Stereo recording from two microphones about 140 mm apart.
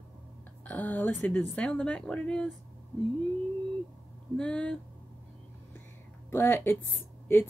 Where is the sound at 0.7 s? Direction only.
10° left (ahead or behind).